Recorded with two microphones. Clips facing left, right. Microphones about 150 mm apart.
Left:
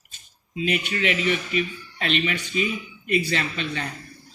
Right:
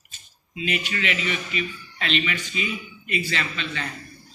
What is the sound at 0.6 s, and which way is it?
A man's voice, 40° left (ahead or behind).